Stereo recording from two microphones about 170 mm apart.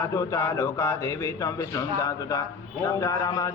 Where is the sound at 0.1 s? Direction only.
15° left (ahead or behind).